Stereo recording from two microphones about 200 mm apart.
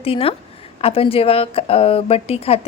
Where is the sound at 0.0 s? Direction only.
30° left (ahead or behind).